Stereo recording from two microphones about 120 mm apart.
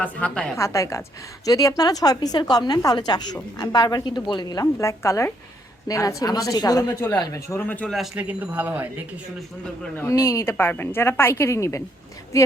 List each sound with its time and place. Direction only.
0.0 s a woman's voice: 10° left (ahead or behind)
0.5 s a woman's voice: 25° left (ahead or behind)
7.7 s a woman's voice: 10° left (ahead or behind)
7.9 s speech: 5° right (ahead or behind)
10.0 s speech: 20° left (ahead or behind)